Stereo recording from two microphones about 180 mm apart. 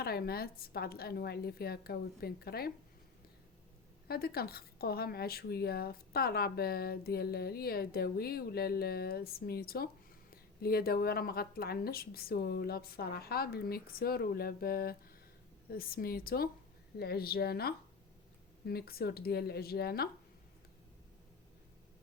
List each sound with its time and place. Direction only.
0.0 s speech: 60° left (ahead or behind)
4.1 s speech: 60° left (ahead or behind)